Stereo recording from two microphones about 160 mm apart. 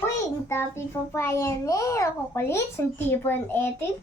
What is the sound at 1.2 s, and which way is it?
A child's voice, 15° left (ahead or behind).